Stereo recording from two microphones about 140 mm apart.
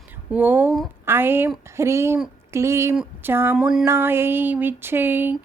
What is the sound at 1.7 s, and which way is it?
Speech, 20° right (ahead or behind).